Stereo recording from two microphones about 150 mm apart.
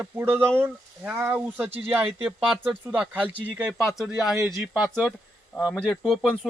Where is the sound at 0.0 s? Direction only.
15° right (ahead or behind).